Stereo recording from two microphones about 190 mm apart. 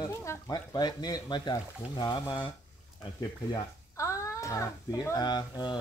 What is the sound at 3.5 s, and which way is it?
Speech, 15° left (ahead or behind).